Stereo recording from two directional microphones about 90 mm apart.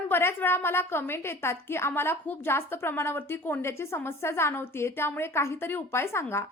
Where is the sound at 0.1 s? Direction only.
25° left (ahead or behind).